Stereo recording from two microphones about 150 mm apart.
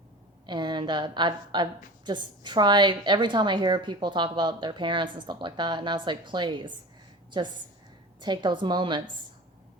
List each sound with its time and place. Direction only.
0.4 s a woman's voice: 30° right (ahead or behind)